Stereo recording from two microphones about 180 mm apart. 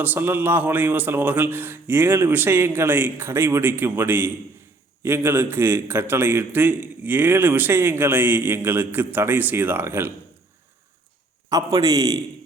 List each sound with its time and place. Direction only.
0.0 s a man's voice: 10° right (ahead or behind)
11.4 s a man's voice: 20° right (ahead or behind)